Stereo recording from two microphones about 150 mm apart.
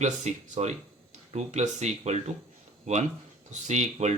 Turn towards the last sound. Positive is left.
turn(degrees=-50)  # may be behind; listen again after turning